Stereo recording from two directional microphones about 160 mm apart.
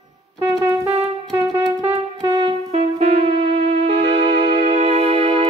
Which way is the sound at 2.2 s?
25° right (ahead or behind).